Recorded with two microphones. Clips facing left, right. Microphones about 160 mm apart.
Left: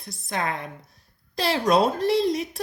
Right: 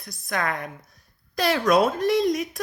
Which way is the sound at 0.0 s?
25° left (ahead or behind).